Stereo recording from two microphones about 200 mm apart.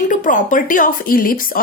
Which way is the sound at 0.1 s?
40° left (ahead or behind).